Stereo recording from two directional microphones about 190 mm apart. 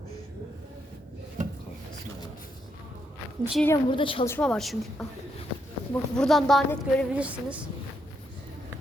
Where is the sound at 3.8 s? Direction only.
25° left (ahead or behind).